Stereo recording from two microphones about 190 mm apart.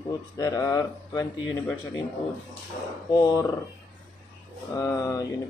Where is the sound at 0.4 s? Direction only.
20° left (ahead or behind).